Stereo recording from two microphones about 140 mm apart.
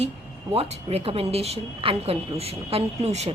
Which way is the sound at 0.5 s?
45° right (ahead or behind).